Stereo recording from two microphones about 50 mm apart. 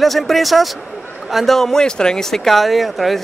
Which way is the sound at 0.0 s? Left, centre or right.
Centre.